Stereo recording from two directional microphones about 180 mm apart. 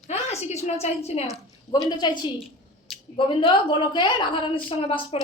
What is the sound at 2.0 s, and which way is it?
A woman's voice, 25° left (ahead or behind).